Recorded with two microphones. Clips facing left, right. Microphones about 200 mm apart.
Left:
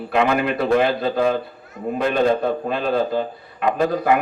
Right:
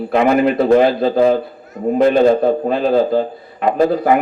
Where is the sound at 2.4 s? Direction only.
35° right (ahead or behind).